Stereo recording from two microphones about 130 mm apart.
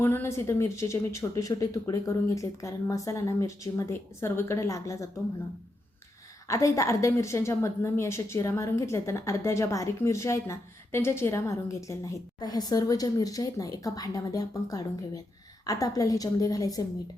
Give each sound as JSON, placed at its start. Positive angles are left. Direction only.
{"t": 0.0, "sound": "a woman's voice", "side_deg": 20}
{"t": 6.5, "sound": "a woman's voice", "side_deg": 25}